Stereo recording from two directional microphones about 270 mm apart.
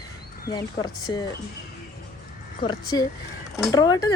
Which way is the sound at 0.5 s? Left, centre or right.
Centre.